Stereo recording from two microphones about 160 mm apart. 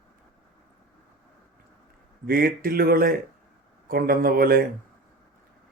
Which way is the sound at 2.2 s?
65° right (ahead or behind).